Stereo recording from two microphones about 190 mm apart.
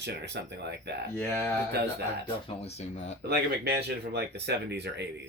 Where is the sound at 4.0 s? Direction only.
60° right (ahead or behind).